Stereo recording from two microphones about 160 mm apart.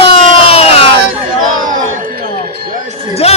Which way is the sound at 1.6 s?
55° right (ahead or behind).